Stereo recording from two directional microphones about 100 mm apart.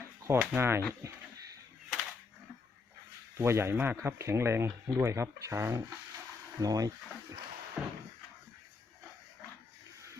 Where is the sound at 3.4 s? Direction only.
25° right (ahead or behind).